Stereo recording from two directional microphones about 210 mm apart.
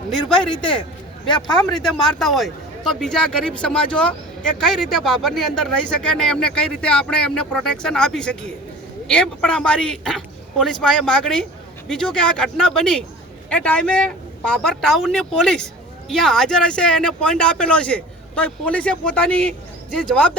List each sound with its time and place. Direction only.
0.5 s speech: 20° left (ahead or behind)
1.8 s speech: centre (ahead or behind)